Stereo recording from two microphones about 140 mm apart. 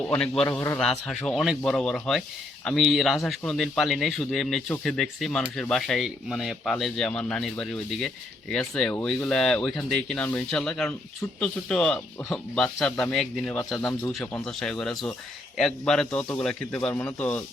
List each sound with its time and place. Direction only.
0.1 s speech: 5° left (ahead or behind)
0.4 s a man's voice: 20° left (ahead or behind)
0.8 s a man's voice: 5° left (ahead or behind)